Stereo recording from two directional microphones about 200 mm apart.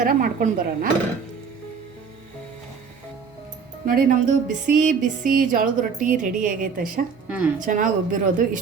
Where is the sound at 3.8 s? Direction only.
45° right (ahead or behind).